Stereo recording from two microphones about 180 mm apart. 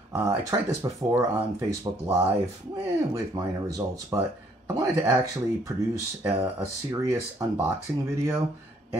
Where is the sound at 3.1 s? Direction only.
20° right (ahead or behind).